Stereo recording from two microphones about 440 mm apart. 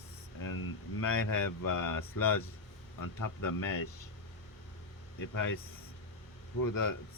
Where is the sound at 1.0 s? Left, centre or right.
Left.